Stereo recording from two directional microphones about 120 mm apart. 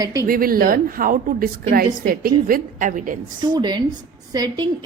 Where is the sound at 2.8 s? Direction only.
90° right.